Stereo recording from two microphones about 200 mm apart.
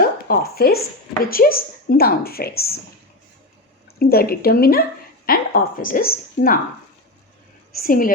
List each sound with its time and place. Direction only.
0.0 s a woman's voice: 45° left (ahead or behind)
4.0 s a woman's voice: 50° left (ahead or behind)
7.8 s a woman's voice: 45° left (ahead or behind)